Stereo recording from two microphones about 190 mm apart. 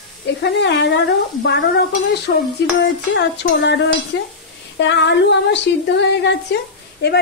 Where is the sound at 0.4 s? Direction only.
65° left (ahead or behind).